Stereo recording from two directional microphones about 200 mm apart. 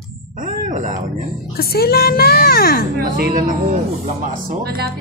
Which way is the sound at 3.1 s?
40° right (ahead or behind).